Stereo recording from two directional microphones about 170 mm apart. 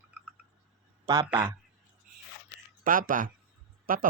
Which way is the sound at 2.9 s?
55° right (ahead or behind).